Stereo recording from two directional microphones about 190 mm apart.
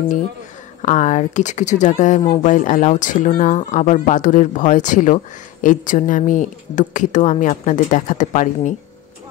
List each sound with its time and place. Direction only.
0.8 s speech: 40° left (ahead or behind)